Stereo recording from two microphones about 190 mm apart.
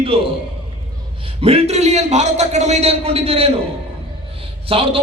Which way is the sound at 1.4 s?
30° right (ahead or behind).